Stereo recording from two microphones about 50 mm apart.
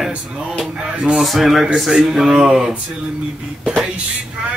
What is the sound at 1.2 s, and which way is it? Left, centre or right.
Speech, centre.